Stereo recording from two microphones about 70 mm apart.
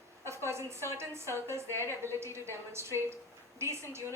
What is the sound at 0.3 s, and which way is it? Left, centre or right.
A woman's voice, right.